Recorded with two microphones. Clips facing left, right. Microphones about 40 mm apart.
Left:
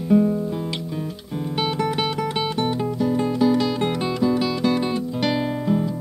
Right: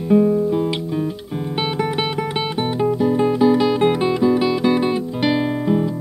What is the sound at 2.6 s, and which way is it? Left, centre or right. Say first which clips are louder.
Music: right 7 dB; centre.